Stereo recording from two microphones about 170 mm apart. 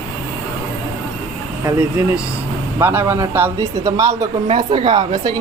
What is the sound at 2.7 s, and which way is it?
Speech, 10° right (ahead or behind).